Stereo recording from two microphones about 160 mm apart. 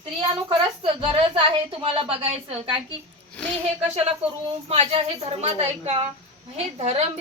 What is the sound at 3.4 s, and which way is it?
Speech, 5° left (ahead or behind).